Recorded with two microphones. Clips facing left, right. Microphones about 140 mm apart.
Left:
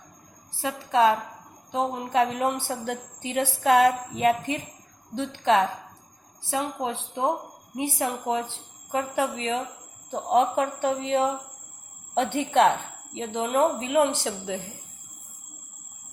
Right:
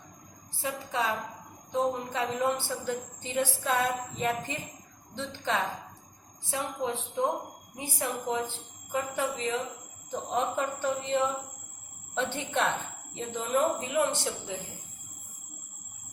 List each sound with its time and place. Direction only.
0.6 s speech: 85° left
1.7 s a woman's voice: 65° left (ahead or behind)
6.5 s speech: 90° left
7.8 s a woman's voice: 75° left (ahead or behind)
13.1 s a woman's voice: 80° left